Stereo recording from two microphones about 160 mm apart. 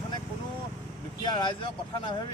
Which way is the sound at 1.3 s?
30° left (ahead or behind).